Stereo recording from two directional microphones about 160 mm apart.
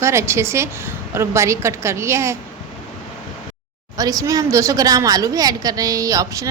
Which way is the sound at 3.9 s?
20° right (ahead or behind).